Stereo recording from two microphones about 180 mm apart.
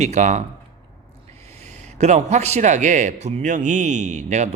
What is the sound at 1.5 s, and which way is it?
Speech, 40° right (ahead or behind).